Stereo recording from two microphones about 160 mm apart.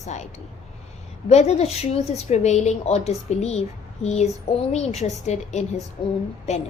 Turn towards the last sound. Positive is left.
turn(degrees=45)  # may be behind; listen again after turning